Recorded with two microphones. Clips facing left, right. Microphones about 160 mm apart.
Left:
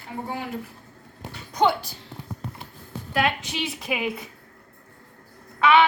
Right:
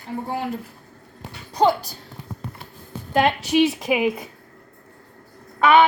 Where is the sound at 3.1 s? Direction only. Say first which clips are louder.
Right 7 dB; 40° right (ahead or behind).